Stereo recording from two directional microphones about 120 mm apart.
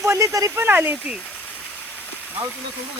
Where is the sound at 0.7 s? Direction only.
15° right (ahead or behind).